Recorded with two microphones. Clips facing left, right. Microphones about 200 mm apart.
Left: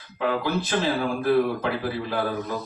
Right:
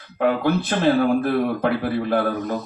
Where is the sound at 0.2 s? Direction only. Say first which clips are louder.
Right 5 dB; 55° right (ahead or behind).